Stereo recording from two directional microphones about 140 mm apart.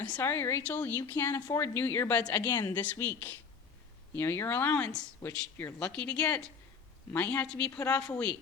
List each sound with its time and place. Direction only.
0.0 s a woman's voice: 15° left (ahead or behind)